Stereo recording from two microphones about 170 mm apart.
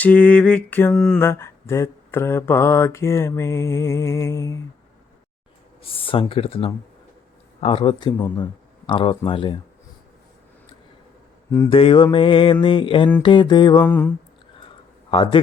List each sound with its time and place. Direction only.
0.0 s mantra: 10° left (ahead or behind)
5.8 s speech: 30° left (ahead or behind)
11.7 s speech: 30° left (ahead or behind)
13.8 s mantra: 10° left (ahead or behind)
15.1 s a man's voice: 30° left (ahead or behind)